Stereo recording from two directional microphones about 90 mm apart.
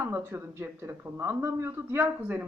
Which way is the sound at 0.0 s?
25° right (ahead or behind).